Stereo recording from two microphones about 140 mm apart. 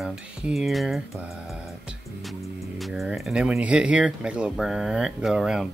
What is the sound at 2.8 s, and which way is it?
Speech, 5° right (ahead or behind).